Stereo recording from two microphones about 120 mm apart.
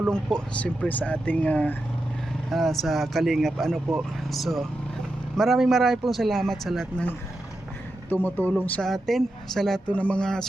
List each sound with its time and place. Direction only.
0.1 s speech: 5° left (ahead or behind)
2.5 s speech: centre (ahead or behind)
8.1 s speech: 15° left (ahead or behind)
8.8 s speech: centre (ahead or behind)